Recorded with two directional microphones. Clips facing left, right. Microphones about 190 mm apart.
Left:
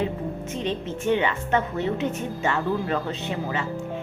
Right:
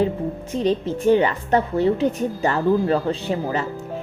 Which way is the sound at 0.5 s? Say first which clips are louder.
Right 9 dB; 35° right (ahead or behind).